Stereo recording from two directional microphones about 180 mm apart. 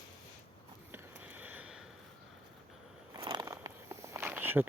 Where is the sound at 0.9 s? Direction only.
10° right (ahead or behind).